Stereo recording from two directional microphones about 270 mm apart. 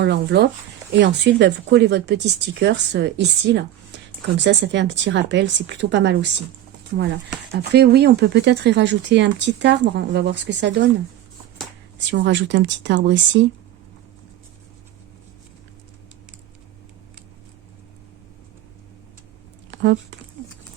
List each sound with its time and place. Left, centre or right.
0.0 s speech: right
7.5 s speech: right
11.9 s speech: right
19.7 s speech: right